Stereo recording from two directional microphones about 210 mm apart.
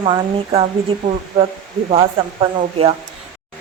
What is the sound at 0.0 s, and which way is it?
A woman's voice, 25° right (ahead or behind).